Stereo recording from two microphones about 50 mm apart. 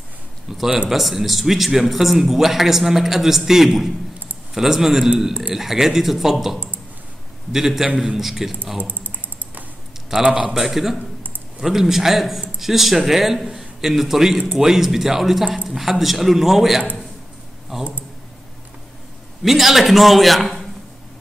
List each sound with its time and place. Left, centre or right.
0.5 s a man's voice: centre
7.5 s a man's voice: centre
8.7 s speech: right
10.2 s a man's voice: right
10.5 s a man's voice: centre
19.4 s a man's voice: centre